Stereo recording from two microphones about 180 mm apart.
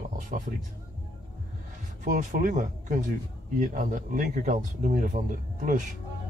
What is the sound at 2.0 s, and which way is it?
Speech, 45° right (ahead or behind).